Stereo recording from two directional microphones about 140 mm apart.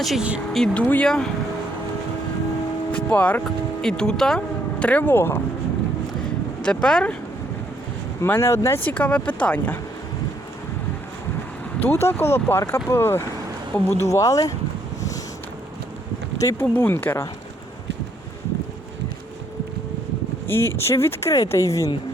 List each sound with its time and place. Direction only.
0.0 s speech: 5° right (ahead or behind)
0.6 s speech: 10° left (ahead or behind)
2.9 s speech: 10° left (ahead or behind)
6.6 s speech: 5° left (ahead or behind)
8.2 s speech: 20° left (ahead or behind)
11.8 s speech: 15° left (ahead or behind)
14.1 s speech: 25° left (ahead or behind)
16.4 s speech: 20° left (ahead or behind)
20.5 s speech: 15° left (ahead or behind)